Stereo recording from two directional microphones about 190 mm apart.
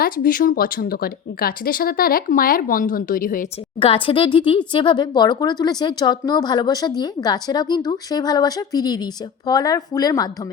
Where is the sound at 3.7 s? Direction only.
25° left (ahead or behind).